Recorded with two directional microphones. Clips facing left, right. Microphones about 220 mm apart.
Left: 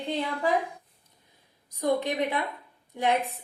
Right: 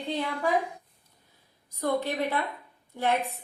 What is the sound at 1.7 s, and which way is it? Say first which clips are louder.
A woman's voice: left 2 dB; 15° left (ahead or behind).